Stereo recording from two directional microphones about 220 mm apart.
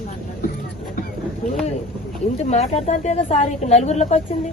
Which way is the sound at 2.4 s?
30° left (ahead or behind).